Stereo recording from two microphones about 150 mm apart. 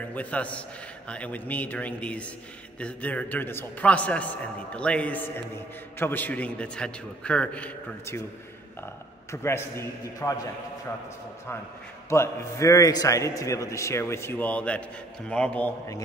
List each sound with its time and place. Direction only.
0.1 s a man's voice: 10° left (ahead or behind)
9.3 s a man's voice: 15° left (ahead or behind)
12.1 s a man's voice: 20° left (ahead or behind)